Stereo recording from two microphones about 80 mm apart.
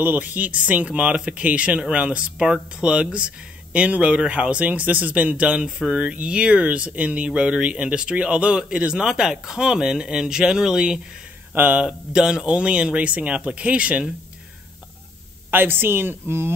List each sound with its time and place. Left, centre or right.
0.0 s speech: centre
11.5 s speech: right
15.5 s speech: right